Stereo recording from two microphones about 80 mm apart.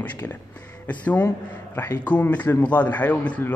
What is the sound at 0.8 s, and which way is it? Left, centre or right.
A man's voice, centre.